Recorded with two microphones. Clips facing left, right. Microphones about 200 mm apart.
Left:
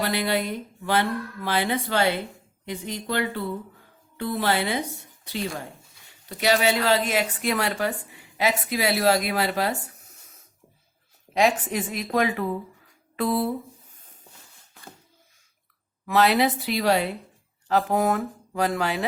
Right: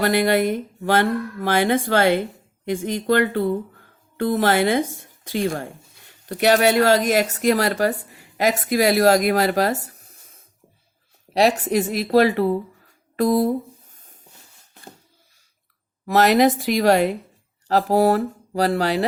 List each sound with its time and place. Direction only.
0.1 s a woman's voice: 50° right (ahead or behind)
16.0 s speech: 45° right (ahead or behind)